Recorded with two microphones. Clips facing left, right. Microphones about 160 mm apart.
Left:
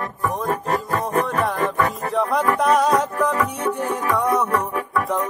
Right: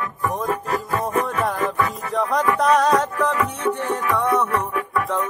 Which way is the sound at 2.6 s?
5° left (ahead or behind).